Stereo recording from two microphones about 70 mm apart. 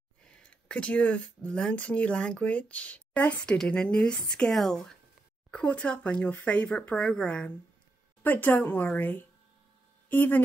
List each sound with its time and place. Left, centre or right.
0.2 s speech: centre
5.5 s speech: centre
8.2 s speech: left